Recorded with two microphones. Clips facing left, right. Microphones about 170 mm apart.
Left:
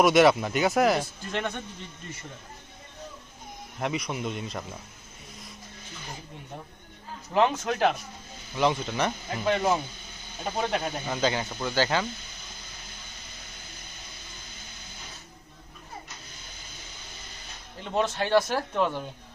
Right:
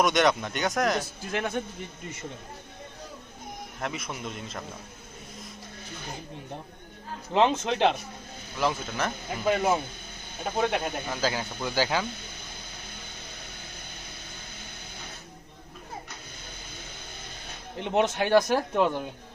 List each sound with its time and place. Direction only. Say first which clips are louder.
0.0 s speech: left 4 dB; 5° left (ahead or behind)
3.8 s speech: left 5 dB; centre (ahead or behind)
7.3 s a man's voice: right 1 dB; 25° right (ahead or behind)
8.5 s speech: left 3 dB; centre (ahead or behind)
17.7 s speech: right 2 dB; 20° right (ahead or behind)